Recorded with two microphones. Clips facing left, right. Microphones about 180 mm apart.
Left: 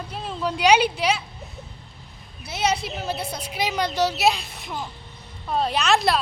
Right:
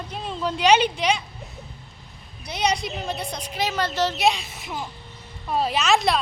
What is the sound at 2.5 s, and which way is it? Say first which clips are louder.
A woman's voice: even; 5° left (ahead or behind).